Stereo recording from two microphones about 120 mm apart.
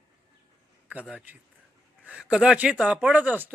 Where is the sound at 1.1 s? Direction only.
15° right (ahead or behind).